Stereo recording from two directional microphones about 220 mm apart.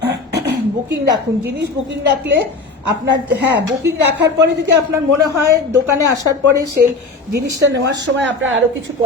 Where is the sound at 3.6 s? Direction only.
50° right (ahead or behind).